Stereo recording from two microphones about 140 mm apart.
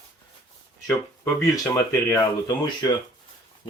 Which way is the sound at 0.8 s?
25° left (ahead or behind).